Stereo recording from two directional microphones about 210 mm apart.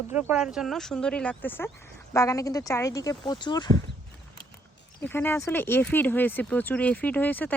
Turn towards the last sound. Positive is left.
turn(degrees=10)  # may be behind; listen again after turning